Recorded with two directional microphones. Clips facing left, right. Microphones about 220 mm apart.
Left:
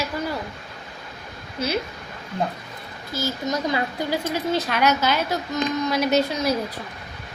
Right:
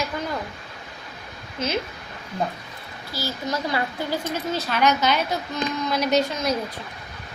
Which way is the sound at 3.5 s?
15° left (ahead or behind).